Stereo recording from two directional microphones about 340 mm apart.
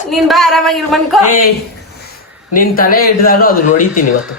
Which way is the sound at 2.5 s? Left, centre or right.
Left.